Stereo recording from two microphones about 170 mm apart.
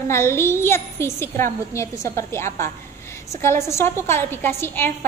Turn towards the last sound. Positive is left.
turn(degrees=15)  # may be behind; listen again after turning